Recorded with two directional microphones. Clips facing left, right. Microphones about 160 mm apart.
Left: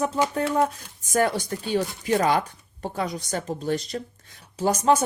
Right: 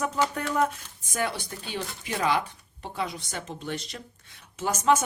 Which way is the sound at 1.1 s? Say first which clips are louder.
Left 8 dB; 45° left (ahead or behind).